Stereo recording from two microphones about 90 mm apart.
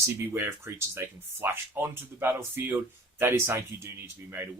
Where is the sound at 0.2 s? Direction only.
25° right (ahead or behind).